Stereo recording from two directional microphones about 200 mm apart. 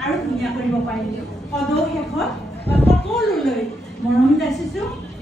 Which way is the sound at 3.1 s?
Centre (ahead or behind).